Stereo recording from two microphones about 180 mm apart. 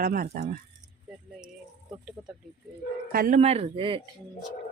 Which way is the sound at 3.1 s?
55° right (ahead or behind).